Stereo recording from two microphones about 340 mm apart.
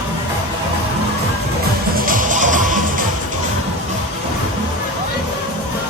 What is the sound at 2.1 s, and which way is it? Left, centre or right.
Music, right.